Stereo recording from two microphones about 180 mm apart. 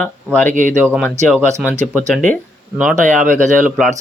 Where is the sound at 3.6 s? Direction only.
Centre (ahead or behind).